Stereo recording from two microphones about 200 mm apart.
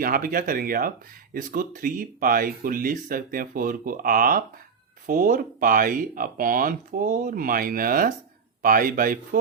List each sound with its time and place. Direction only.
0.0 s speech: 45° right (ahead or behind)